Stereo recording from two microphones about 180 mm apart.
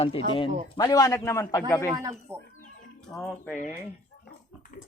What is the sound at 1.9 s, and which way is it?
Speech, 15° right (ahead or behind).